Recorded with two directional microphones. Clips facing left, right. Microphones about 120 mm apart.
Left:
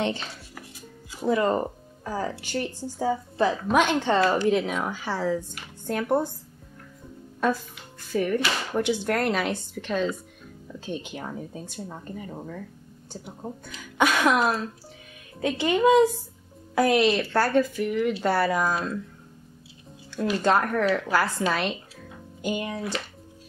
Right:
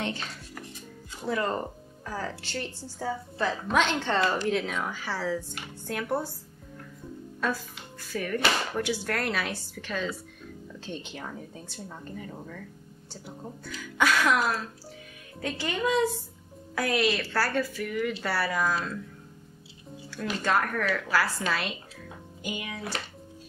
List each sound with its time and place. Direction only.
0.6 s dishes: 5° left (ahead or behind)
1.3 s a woman's voice: 20° left (ahead or behind)
8.1 s a woman's voice: 20° left (ahead or behind)
20.1 s a woman's voice: 25° left (ahead or behind)